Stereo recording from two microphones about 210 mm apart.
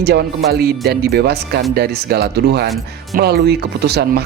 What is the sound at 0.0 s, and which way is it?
Speech, 50° right (ahead or behind).